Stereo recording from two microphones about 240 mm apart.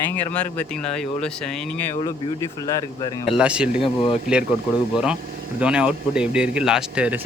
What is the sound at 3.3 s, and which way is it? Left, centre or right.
Speech, centre.